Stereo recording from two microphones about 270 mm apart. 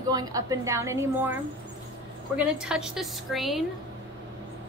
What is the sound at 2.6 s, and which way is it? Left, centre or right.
A woman's voice, centre.